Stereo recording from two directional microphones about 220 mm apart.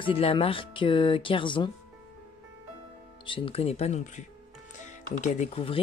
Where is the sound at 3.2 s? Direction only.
25° left (ahead or behind).